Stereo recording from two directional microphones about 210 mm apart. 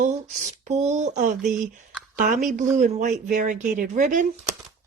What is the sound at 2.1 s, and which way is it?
Speech, 40° right (ahead or behind).